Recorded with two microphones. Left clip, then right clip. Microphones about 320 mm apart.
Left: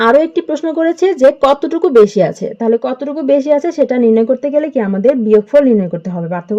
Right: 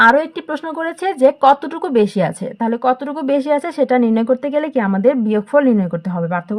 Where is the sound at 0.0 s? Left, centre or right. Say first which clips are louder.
Left 2 dB; right.